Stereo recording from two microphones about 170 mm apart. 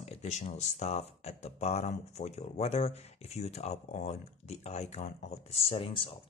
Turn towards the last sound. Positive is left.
turn(degrees=30)  # may be behind; listen again after turning